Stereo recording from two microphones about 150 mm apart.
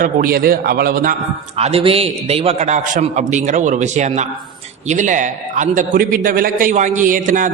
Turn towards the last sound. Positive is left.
turn(degrees=-60)  # may be behind; listen again after turning